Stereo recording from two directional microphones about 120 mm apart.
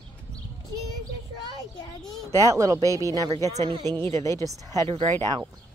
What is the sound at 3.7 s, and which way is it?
Speech, 40° right (ahead or behind).